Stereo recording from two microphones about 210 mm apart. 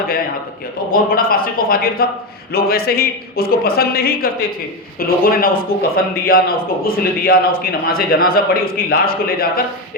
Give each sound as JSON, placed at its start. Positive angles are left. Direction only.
{"t": 0.9, "sound": "a man's voice", "side_deg": 45}